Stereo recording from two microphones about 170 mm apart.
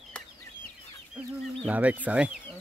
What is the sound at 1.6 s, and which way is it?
Speech, 10° right (ahead or behind).